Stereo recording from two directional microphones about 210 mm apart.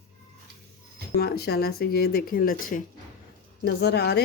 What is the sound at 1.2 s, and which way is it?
A woman's voice, 50° left (ahead or behind).